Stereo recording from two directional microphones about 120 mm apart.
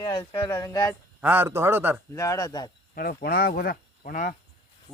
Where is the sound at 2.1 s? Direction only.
25° left (ahead or behind).